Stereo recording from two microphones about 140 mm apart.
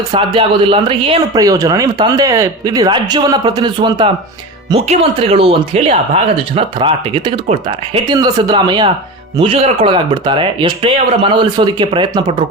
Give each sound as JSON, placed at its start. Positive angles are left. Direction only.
{"t": 0.1, "sound": "speech", "side_deg": -40}
{"t": 1.3, "sound": "speech", "side_deg": -25}
{"t": 4.7, "sound": "speech", "side_deg": -45}
{"t": 8.1, "sound": "speech", "side_deg": -30}